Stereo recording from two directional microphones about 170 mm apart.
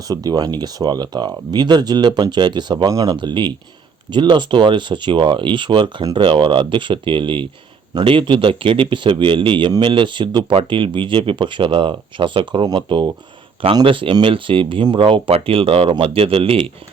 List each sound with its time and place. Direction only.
0.1 s speech: 20° right (ahead or behind)